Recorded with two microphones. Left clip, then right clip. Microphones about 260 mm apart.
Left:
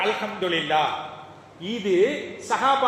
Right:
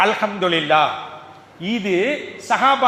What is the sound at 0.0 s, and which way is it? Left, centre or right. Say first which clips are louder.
A man's voice: right 7 dB; right.